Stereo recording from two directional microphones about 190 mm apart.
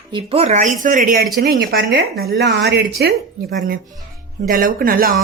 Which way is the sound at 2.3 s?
65° right (ahead or behind).